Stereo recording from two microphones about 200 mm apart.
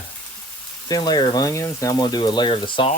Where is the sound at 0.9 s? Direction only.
20° left (ahead or behind).